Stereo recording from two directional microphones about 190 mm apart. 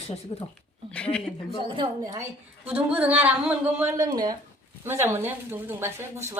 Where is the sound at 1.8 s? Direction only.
20° right (ahead or behind).